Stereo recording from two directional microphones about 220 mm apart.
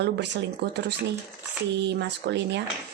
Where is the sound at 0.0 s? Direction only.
50° right (ahead or behind).